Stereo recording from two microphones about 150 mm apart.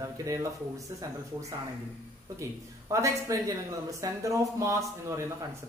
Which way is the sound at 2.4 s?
20° right (ahead or behind).